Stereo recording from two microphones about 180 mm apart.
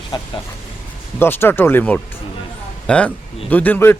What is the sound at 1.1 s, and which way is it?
Speech, 10° left (ahead or behind).